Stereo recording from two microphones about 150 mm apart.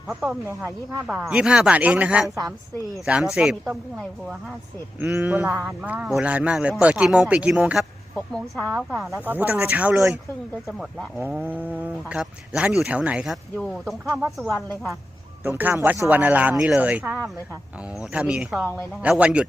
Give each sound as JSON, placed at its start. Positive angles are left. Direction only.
{"t": 0.1, "sound": "speech", "side_deg": -5}
{"t": 0.4, "sound": "speech", "side_deg": -15}
{"t": 8.1, "sound": "speech", "side_deg": 5}
{"t": 11.2, "sound": "speech", "side_deg": -10}
{"t": 15.4, "sound": "speech", "side_deg": -15}